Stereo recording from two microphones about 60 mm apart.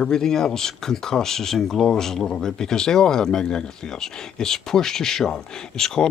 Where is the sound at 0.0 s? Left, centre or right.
Centre.